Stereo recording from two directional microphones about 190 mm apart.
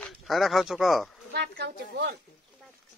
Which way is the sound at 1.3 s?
60° right (ahead or behind).